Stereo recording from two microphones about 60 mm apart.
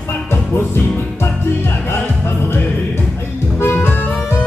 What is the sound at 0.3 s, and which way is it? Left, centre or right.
Music, left.